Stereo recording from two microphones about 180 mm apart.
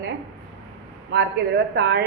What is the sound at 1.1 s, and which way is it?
Speech, 65° right (ahead or behind).